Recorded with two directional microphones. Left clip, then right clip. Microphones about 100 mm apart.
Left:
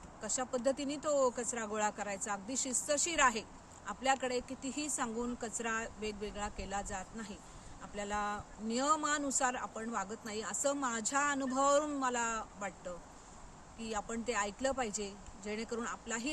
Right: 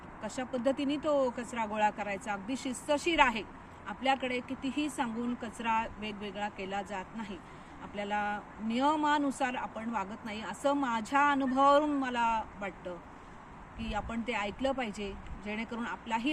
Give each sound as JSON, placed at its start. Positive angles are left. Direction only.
{"t": 0.2, "sound": "speech", "side_deg": 50}
{"t": 13.8, "sound": "speech", "side_deg": 55}